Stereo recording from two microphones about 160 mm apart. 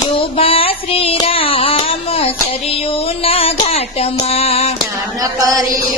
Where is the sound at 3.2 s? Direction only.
35° left (ahead or behind).